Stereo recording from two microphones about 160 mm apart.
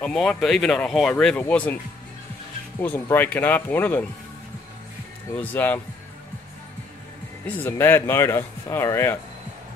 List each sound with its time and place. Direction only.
0.0 s speech: 5° left (ahead or behind)
2.8 s speech: 10° left (ahead or behind)
5.4 s speech: 15° left (ahead or behind)
7.4 s speech: 15° left (ahead or behind)